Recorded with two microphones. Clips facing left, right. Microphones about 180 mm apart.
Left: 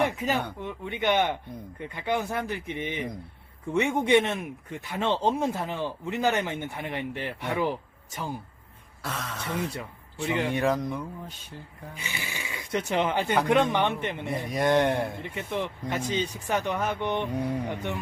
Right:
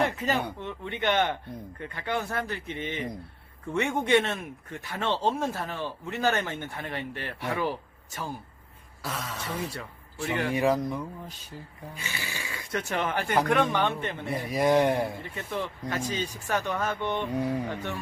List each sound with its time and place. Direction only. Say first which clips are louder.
0.0 s speech: left 1 dB; 10° left (ahead or behind)
9.0 s a man's voice: even; centre (ahead or behind)
10.5 s a man's voice: right 1 dB; centre (ahead or behind)
11.9 s speech: left 1 dB; 15° left (ahead or behind)
14.3 s a man's voice: right 1 dB; 5° right (ahead or behind)
15.2 s speech: left 2 dB; 20° left (ahead or behind)
17.3 s a man's voice: right 1 dB; centre (ahead or behind)
17.7 s speech: left 2 dB; 20° left (ahead or behind)